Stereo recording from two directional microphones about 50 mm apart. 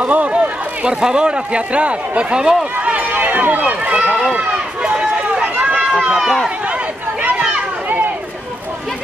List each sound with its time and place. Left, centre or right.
0.0 s a man's voice: right
2.8 s run: right
3.1 s speech: right
3.9 s speech: centre
4.3 s run: right
6.0 s speech: centre
6.7 s a sound: right